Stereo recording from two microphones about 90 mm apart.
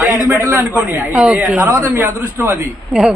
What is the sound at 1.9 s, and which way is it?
Speech, 25° right (ahead or behind).